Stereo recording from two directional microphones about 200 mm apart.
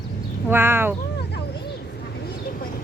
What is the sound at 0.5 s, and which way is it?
Speech, 10° right (ahead or behind).